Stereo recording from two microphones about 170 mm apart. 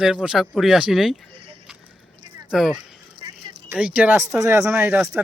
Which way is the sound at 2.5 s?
5° right (ahead or behind).